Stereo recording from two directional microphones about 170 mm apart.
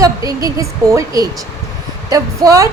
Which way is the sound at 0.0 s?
20° right (ahead or behind).